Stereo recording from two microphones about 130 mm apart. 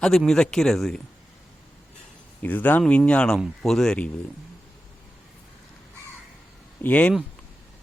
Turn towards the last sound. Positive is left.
turn(degrees=10)  # may be behind; listen again after turning